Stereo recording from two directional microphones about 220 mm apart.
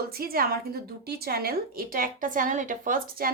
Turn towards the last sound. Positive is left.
turn(degrees=-40)  # may be behind; listen again after turning